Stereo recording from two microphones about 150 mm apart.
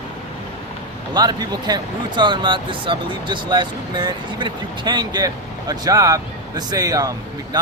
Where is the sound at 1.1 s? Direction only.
25° right (ahead or behind).